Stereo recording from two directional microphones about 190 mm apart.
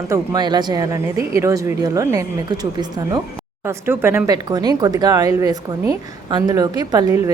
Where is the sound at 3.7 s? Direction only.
15° right (ahead or behind).